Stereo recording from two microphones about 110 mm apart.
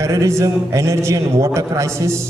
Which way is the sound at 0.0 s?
30° right (ahead or behind).